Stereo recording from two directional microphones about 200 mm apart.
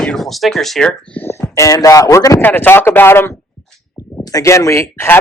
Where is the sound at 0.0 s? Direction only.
Centre (ahead or behind).